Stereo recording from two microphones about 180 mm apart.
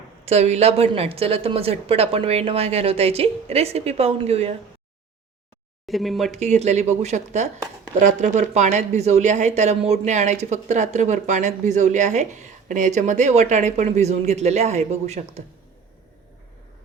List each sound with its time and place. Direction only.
0.3 s speech: 35° right (ahead or behind)
5.9 s speech: centre (ahead or behind)
6.3 s speech: 40° right (ahead or behind)